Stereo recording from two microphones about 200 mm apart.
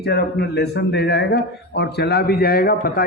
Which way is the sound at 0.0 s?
55° left (ahead or behind).